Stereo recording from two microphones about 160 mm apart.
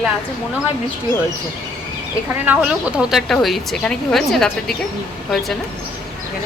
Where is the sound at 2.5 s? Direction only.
5° right (ahead or behind).